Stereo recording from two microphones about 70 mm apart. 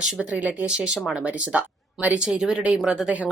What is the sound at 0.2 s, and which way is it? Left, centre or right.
A woman's voice, centre.